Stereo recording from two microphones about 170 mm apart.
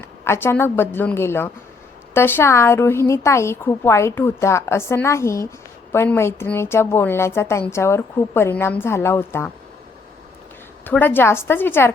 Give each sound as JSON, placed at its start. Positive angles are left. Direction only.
{"t": 0.0, "sound": "a woman's voice", "side_deg": 15}
{"t": 10.8, "sound": "a woman's voice", "side_deg": 10}